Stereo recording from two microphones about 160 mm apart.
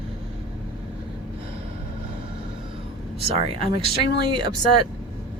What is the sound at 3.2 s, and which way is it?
Speech, 40° right (ahead or behind).